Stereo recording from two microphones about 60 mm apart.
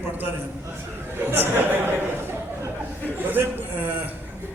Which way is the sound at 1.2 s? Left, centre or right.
Right.